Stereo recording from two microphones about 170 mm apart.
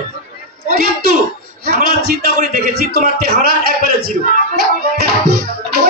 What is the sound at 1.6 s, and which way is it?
Speech, 65° right (ahead or behind).